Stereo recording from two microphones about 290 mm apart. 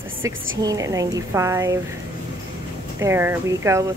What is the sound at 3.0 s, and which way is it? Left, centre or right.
Speech, centre.